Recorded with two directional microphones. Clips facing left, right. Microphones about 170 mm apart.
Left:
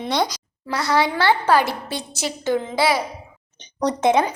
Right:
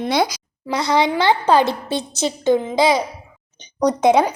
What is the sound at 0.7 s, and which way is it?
A woman's voice, 20° right (ahead or behind).